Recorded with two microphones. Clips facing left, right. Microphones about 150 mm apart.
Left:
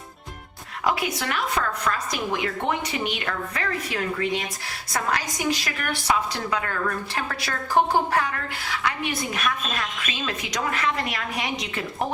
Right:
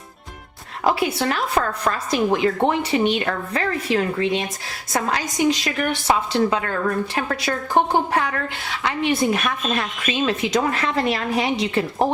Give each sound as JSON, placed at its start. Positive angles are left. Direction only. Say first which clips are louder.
{"t": 0.9, "sound": "a woman's voice", "louder": "right 5 dB", "side_deg": -30}